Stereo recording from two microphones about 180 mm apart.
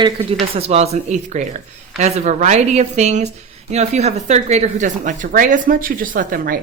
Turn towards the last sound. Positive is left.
turn(degrees=-50)  # may be behind; listen again after turning